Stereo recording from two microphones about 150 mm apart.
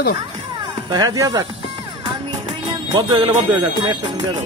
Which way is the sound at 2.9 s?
30° right (ahead or behind).